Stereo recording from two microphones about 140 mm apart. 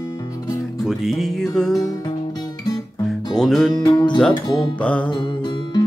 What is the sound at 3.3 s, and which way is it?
Music, 5° left (ahead or behind).